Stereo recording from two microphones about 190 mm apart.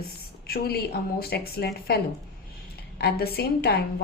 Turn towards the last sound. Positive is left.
turn(degrees=60)  # may be behind; listen again after turning